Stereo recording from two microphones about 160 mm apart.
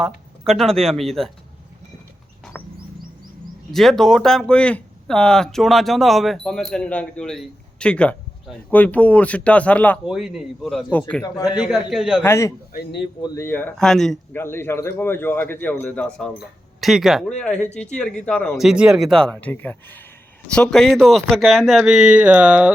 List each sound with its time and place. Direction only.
0.0 s speech: centre (ahead or behind)
2.5 s a sound: 10° left (ahead or behind)
3.7 s speech: centre (ahead or behind)
10.1 s speech: 5° right (ahead or behind)
12.2 s a man's voice: 15° left (ahead or behind)
14.3 s a man's voice: 15° left (ahead or behind); by 22.7 s 5° right (ahead or behind)